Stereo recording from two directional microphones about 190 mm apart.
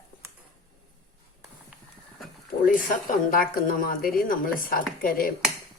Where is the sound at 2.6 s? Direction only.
50° left (ahead or behind).